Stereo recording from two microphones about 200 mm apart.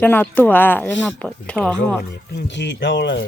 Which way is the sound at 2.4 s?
65° left (ahead or behind).